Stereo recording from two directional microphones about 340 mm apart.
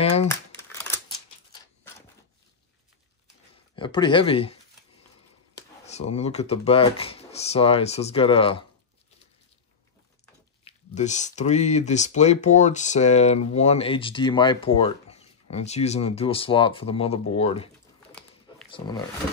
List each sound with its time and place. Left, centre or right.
0.0 s crumpling: centre
0.3 s crumpling: centre
3.7 s speech: centre
5.6 s speech: centre
10.6 s speech: centre
18.7 s speech: centre